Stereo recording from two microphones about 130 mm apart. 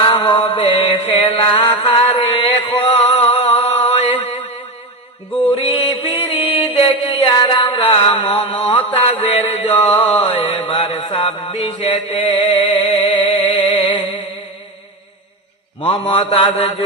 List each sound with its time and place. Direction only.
0.0 s mantra: 40° left (ahead or behind)
5.5 s mantra: 40° left (ahead or behind)
15.8 s mantra: 40° left (ahead or behind)